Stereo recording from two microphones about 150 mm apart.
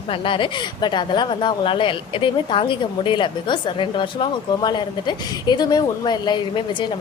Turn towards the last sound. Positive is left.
turn(degrees=30)  # may be behind; listen again after turning